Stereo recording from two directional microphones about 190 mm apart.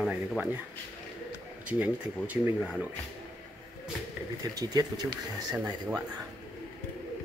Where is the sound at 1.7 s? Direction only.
10° right (ahead or behind).